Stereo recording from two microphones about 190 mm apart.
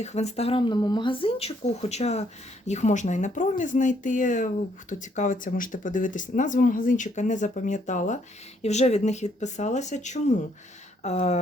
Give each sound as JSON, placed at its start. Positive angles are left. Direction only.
{"t": 0.0, "sound": "speech", "side_deg": 35}